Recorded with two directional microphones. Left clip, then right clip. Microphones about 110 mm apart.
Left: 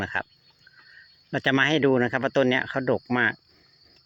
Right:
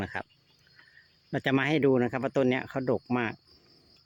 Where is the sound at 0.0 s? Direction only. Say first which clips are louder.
Left 7 dB; 25° right (ahead or behind).